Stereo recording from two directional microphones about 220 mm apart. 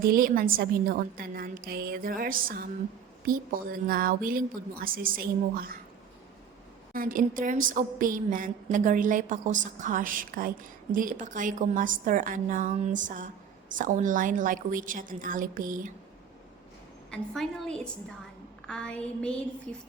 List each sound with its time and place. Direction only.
0.0 s a woman's voice: 40° right (ahead or behind)
6.9 s a woman's voice: 40° right (ahead or behind)
17.1 s a woman's voice: 5° left (ahead or behind)